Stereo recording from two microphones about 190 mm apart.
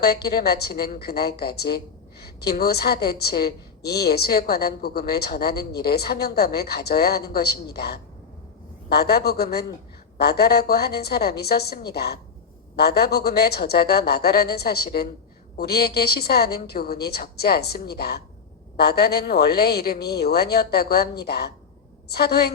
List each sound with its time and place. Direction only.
0.0 s a woman's voice: 55° left (ahead or behind)